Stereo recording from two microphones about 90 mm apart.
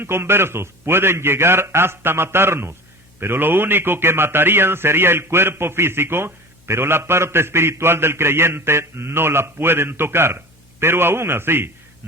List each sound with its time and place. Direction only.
0.0 s a man's voice: 25° right (ahead or behind)